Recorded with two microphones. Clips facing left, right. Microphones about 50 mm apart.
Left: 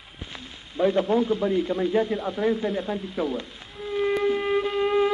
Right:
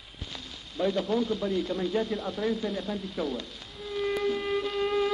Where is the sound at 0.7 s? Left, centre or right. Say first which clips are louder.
Left 6 dB; left.